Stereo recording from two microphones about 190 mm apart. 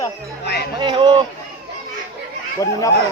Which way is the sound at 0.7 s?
25° right (ahead or behind).